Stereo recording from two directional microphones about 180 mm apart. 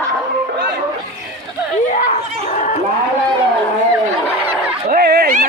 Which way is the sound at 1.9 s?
45° left (ahead or behind).